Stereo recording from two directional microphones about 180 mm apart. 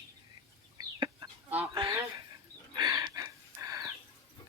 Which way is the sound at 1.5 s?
30° right (ahead or behind).